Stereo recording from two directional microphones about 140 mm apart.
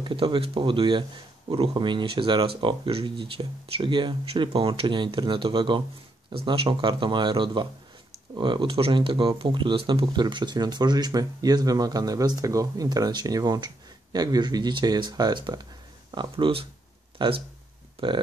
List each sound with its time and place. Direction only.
0.0 s speech: 35° right (ahead or behind)